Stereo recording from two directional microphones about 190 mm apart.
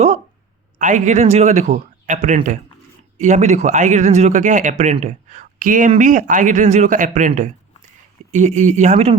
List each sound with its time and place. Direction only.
0.8 s speech: 40° right (ahead or behind)